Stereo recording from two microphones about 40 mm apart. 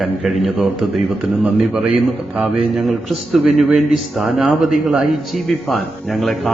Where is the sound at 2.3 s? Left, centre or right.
Centre.